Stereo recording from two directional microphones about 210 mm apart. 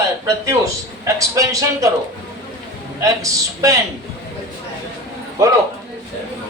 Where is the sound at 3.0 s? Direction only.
15° right (ahead or behind).